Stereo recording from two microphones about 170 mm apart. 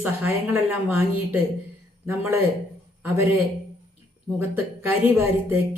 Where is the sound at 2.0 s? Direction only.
15° right (ahead or behind).